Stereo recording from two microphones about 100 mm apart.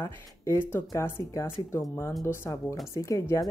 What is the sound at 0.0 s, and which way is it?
Speech, 20° left (ahead or behind).